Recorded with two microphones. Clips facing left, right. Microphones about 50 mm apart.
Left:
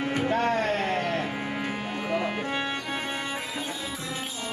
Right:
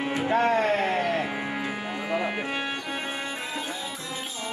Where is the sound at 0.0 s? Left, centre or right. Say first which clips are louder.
Right 2 dB; right.